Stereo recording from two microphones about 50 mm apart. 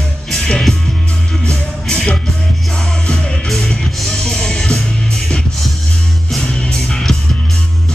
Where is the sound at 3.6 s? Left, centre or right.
Centre.